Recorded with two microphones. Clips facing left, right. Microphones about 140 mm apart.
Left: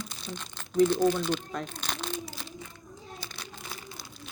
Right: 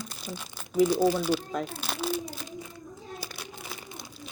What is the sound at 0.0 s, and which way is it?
Speech, 5° right (ahead or behind).